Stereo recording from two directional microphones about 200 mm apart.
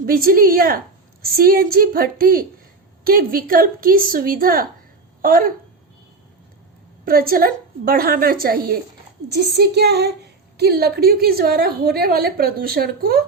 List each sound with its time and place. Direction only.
0.0 s a woman's voice: 45° right (ahead or behind)
7.0 s a woman's voice: 45° right (ahead or behind)